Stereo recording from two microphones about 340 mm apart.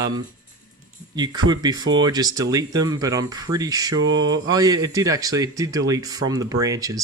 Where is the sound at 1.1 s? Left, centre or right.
Centre.